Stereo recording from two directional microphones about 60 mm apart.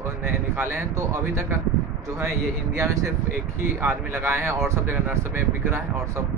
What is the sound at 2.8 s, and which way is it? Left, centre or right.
Speech, right.